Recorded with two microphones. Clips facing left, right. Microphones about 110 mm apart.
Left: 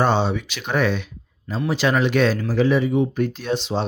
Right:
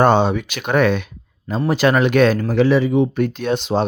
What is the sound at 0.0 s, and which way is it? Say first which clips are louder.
Speech: right 5 dB; 55° right (ahead or behind).